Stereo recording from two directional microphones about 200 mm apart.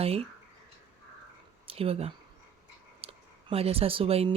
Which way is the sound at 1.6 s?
30° right (ahead or behind).